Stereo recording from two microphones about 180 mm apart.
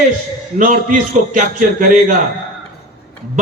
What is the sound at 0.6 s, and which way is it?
A man's voice, 45° right (ahead or behind).